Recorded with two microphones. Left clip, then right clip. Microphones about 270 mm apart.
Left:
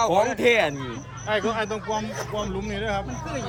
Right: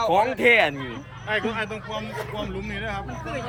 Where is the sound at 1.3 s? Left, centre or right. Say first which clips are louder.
Left 2 dB; left.